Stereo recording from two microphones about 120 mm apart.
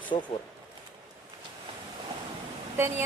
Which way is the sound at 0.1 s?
45° left (ahead or behind).